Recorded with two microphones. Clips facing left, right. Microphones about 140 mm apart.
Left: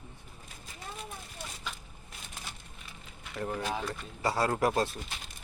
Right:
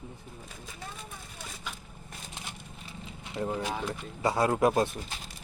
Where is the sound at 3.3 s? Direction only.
20° right (ahead or behind).